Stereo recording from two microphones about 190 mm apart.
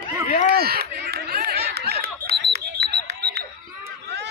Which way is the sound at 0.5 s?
55° right (ahead or behind).